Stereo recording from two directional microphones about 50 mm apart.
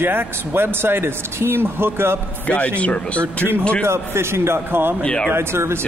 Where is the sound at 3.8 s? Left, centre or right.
Right.